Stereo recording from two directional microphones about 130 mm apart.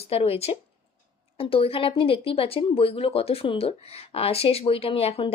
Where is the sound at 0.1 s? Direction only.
50° left (ahead or behind).